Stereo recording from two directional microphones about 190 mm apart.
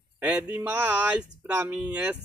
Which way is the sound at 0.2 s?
5° right (ahead or behind).